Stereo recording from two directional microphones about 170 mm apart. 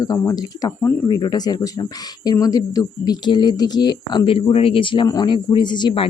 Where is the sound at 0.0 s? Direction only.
20° left (ahead or behind).